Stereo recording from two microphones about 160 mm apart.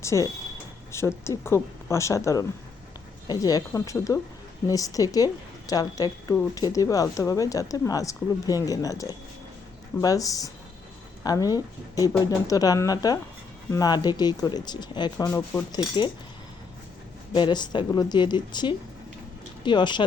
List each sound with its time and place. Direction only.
0.0 s speech: 20° left (ahead or behind)
17.3 s speech: 30° left (ahead or behind)